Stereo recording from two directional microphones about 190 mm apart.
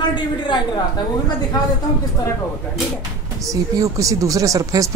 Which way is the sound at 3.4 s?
15° right (ahead or behind).